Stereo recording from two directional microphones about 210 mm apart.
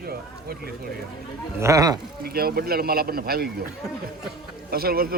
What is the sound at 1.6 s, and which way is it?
Speech, 15° right (ahead or behind).